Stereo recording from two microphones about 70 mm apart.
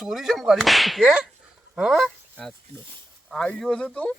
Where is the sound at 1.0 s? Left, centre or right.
Centre.